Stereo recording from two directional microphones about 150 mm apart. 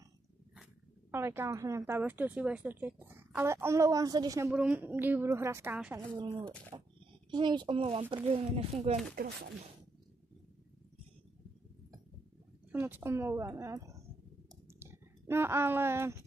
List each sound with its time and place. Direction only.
1.1 s a woman's voice: 15° right (ahead or behind)
4.5 s a woman's voice: 10° right (ahead or behind)
6.7 s speech: 30° right (ahead or behind)
9.1 s speech: 80° right
12.7 s a woman's voice: 15° right (ahead or behind)